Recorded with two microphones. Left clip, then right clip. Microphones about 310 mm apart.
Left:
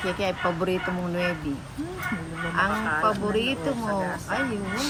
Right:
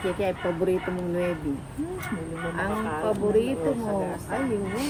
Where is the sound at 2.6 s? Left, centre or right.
Left.